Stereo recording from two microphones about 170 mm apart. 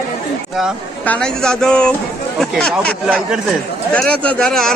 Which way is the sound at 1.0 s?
5° left (ahead or behind).